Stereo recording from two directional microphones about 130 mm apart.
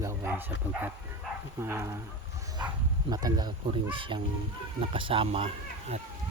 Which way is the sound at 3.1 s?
30° right (ahead or behind).